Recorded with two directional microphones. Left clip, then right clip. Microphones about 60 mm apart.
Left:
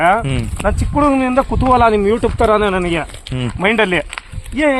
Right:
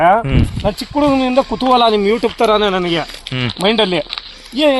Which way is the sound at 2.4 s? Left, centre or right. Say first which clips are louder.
Even; left.